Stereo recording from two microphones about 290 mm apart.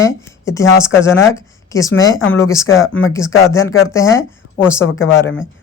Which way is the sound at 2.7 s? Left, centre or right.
Left.